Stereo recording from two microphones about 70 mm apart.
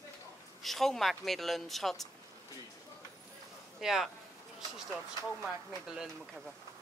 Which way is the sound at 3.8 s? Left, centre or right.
Centre.